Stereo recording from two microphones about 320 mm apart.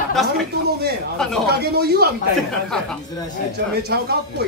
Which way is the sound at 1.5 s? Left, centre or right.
Right.